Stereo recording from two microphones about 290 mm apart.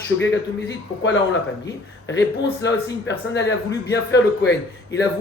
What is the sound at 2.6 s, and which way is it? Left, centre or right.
A man's voice, left.